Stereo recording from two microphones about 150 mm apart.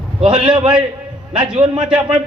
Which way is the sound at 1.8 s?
5° right (ahead or behind).